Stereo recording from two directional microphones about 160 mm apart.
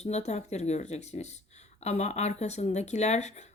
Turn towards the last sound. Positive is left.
turn(degrees=45)  # may be behind; listen again after turning